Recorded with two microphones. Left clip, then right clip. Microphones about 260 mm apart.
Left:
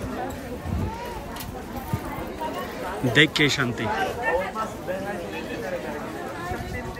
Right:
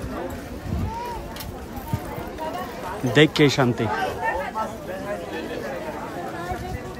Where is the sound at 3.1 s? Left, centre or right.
Centre.